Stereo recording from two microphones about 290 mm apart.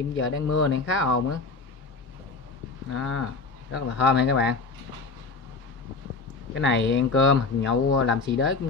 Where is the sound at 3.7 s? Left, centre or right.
Left.